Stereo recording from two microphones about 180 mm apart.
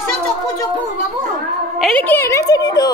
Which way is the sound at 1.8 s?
5° left (ahead or behind).